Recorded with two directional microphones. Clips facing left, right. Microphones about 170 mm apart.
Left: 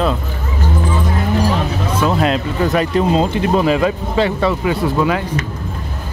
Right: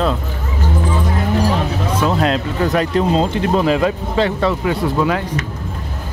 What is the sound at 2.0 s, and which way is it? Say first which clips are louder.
Speech: left 1 dB; 5° left (ahead or behind).